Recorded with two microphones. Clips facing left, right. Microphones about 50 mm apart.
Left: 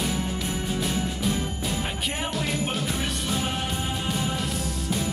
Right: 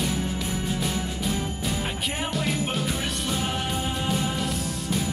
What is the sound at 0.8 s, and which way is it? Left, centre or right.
Jingle bell, centre.